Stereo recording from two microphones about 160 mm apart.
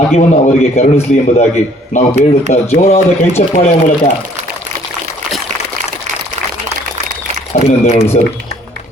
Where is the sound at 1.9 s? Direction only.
50° left (ahead or behind).